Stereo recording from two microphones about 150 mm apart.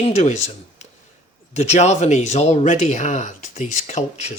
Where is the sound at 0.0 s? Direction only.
50° left (ahead or behind).